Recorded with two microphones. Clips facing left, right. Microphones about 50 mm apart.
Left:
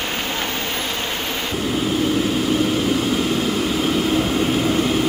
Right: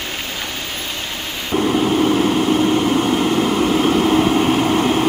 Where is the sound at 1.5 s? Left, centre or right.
Right.